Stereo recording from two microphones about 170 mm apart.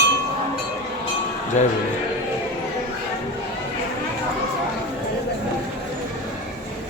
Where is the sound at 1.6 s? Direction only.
45° left (ahead or behind).